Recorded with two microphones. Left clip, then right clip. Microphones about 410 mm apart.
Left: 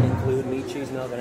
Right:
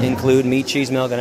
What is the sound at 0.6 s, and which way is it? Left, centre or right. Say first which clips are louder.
Speech: right 10 dB; right.